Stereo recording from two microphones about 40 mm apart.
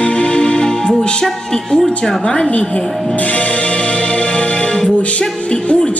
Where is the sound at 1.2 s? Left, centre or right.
Centre.